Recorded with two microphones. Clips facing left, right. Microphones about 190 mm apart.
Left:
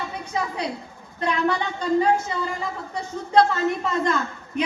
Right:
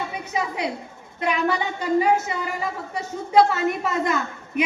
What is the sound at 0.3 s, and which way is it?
A man's voice, 15° right (ahead or behind).